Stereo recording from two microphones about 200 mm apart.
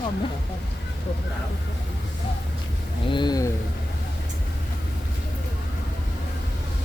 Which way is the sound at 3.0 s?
20° left (ahead or behind).